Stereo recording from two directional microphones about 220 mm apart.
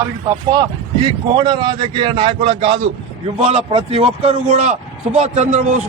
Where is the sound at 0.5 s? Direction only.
20° right (ahead or behind).